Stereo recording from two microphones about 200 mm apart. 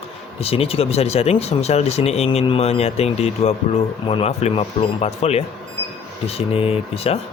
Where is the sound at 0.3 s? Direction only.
30° left (ahead or behind).